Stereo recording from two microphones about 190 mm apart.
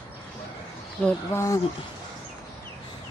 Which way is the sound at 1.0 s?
15° left (ahead or behind).